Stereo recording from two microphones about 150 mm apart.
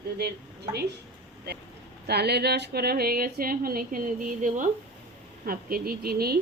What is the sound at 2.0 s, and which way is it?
Speech, 90° right.